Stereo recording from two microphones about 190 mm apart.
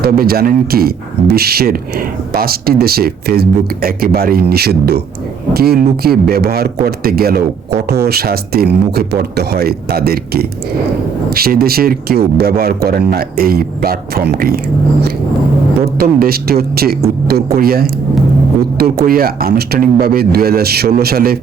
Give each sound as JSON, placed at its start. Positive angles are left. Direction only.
{"t": 0.0, "sound": "speech", "side_deg": -55}
{"t": 15.8, "sound": "speech", "side_deg": -55}